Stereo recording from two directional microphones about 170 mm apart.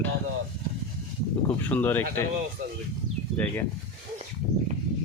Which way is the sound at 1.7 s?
10° left (ahead or behind).